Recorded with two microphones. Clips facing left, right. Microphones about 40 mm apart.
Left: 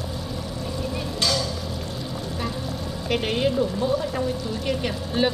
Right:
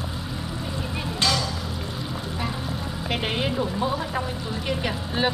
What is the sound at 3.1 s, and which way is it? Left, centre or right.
A woman's voice, centre.